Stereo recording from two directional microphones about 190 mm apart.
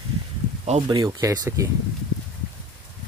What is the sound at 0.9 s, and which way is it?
Speech, 20° right (ahead or behind).